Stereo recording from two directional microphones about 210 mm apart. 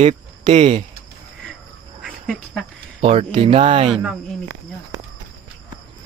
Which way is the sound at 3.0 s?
25° right (ahead or behind).